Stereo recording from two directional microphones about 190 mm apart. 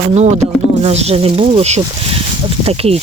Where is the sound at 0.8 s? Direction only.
35° right (ahead or behind).